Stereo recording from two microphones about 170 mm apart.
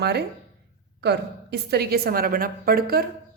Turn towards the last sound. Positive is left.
turn(degrees=-60)  # may be behind; listen again after turning